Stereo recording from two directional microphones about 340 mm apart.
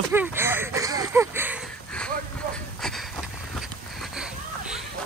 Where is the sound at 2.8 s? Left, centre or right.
Centre.